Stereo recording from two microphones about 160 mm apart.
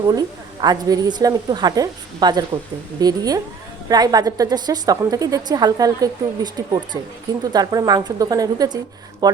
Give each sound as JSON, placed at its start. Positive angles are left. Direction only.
{"t": 0.1, "sound": "a woman's voice", "side_deg": -25}